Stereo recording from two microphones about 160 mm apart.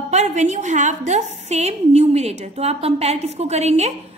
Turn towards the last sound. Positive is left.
turn(degrees=-45)  # may be behind; listen again after turning